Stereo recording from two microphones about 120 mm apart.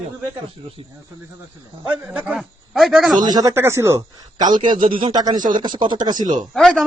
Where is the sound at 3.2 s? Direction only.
35° right (ahead or behind).